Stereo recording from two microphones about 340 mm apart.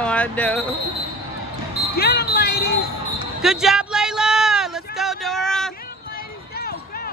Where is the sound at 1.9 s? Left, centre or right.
Left.